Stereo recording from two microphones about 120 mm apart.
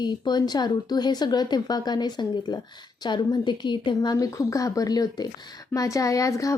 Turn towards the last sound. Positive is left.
turn(degrees=25)  # may be behind; listen again after turning